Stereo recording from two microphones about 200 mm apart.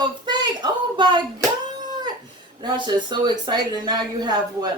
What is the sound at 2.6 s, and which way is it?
Speech, 20° right (ahead or behind).